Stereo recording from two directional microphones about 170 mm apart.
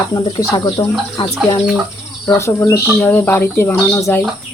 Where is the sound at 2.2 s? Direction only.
15° left (ahead or behind).